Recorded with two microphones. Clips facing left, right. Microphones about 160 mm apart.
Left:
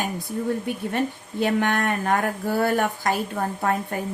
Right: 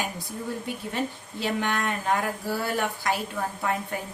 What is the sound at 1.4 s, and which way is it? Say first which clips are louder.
A woman's voice: left 5 dB; 50° left (ahead or behind).